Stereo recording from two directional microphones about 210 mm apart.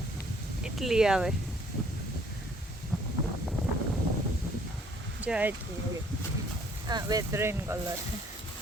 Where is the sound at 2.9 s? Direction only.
Centre (ahead or behind).